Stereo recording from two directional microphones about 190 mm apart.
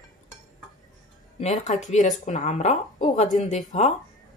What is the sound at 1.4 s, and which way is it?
A woman's voice, 40° left (ahead or behind).